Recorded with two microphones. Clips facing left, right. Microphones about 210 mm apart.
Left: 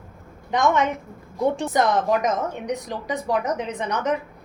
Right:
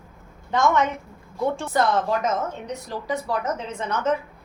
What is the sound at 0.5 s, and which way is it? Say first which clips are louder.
A woman's voice: even; 15° left (ahead or behind).